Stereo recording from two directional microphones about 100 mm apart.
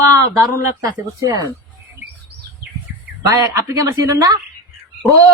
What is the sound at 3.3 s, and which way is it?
A woman's voice, 35° right (ahead or behind).